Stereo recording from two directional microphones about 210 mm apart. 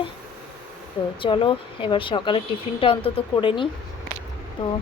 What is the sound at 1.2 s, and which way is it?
A woman's voice, 25° left (ahead or behind).